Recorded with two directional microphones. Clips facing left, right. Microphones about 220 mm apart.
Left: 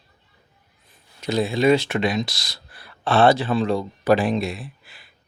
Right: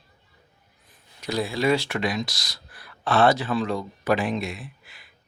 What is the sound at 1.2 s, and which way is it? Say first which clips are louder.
Speech: left 5 dB; 25° left (ahead or behind).